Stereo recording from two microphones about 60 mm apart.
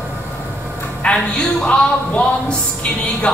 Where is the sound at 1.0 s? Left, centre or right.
Centre.